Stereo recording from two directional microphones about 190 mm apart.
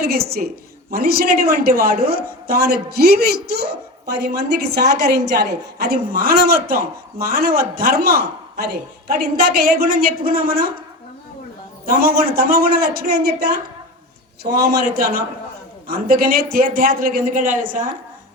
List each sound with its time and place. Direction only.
0.0 s a woman's voice: 55° right (ahead or behind)
11.9 s a woman's voice: 50° right (ahead or behind)